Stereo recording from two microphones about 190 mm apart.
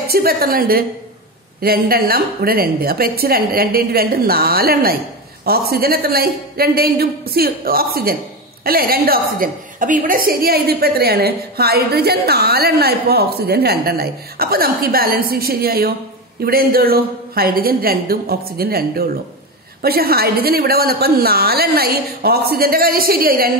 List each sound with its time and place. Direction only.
0.1 s a woman's voice: 50° right (ahead or behind)